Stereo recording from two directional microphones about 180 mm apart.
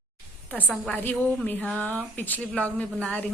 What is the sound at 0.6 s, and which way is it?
A woman's voice, centre (ahead or behind).